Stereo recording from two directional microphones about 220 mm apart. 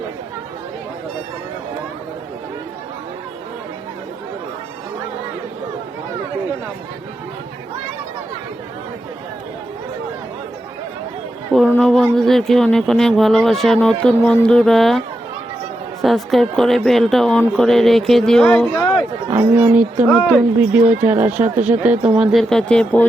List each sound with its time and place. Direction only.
11.5 s a sound: centre (ahead or behind)
12.1 s speech: centre (ahead or behind)
19.4 s speech: 10° right (ahead or behind); by 23.0 s 5° left (ahead or behind)